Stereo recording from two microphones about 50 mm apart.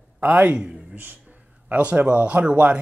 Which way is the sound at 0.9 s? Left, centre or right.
Right.